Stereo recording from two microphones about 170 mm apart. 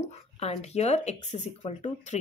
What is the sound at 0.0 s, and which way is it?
A woman's voice, 40° left (ahead or behind).